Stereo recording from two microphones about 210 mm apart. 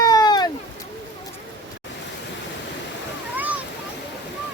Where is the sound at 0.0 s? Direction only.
15° left (ahead or behind).